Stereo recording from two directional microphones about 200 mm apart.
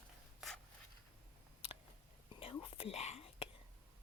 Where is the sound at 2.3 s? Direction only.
25° left (ahead or behind).